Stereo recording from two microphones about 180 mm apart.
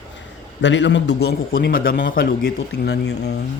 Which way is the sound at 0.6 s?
90° left.